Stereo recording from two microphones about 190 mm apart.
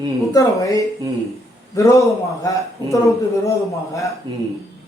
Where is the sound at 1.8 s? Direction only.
15° left (ahead or behind).